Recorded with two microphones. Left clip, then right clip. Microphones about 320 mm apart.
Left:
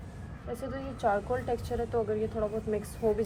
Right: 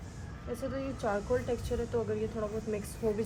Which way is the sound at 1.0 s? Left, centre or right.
Centre.